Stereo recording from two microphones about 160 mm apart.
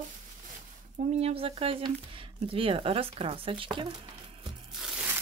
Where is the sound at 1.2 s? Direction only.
35° right (ahead or behind).